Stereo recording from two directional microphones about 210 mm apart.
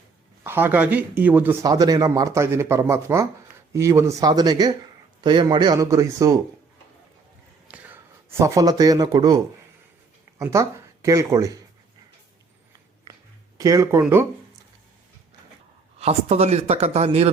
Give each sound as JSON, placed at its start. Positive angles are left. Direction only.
{"t": 0.4, "sound": "speech", "side_deg": -10}
{"t": 7.7, "sound": "a sound", "side_deg": -5}
{"t": 8.4, "sound": "speech", "side_deg": -15}
{"t": 13.6, "sound": "speech", "side_deg": -15}
{"t": 16.0, "sound": "speech", "side_deg": -30}